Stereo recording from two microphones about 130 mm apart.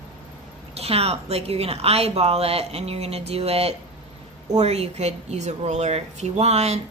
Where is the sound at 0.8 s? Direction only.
50° right (ahead or behind).